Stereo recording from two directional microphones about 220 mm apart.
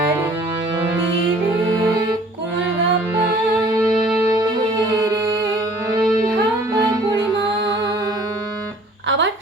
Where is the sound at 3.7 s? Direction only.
15° right (ahead or behind).